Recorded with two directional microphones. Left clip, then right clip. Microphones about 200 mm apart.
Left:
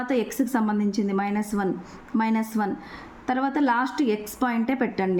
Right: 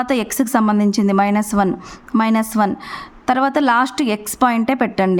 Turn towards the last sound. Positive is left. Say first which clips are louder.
# right 8 dB
turn(degrees=-40)  # may be behind; listen again after turning